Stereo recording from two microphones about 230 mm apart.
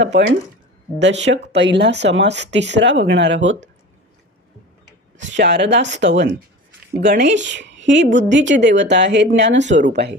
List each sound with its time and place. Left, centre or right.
0.0 s speech: right
5.1 s speech: right
9.6 s speech: right
9.9 s speech: right